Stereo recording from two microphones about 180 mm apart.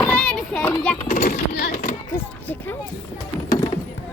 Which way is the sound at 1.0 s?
50° left (ahead or behind).